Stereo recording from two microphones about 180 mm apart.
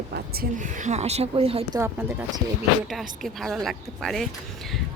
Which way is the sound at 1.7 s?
20° right (ahead or behind).